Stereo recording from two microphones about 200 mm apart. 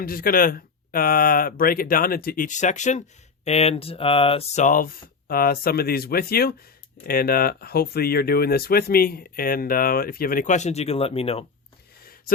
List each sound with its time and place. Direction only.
0.0 s speech: 45° left (ahead or behind); by 11.4 s 30° left (ahead or behind)